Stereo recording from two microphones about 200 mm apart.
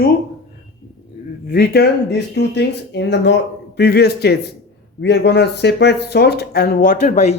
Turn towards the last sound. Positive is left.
turn(degrees=35)  # may be behind; listen again after turning